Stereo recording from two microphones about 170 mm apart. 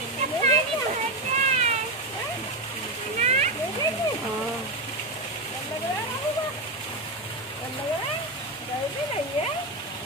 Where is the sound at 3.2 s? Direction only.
40° right (ahead or behind).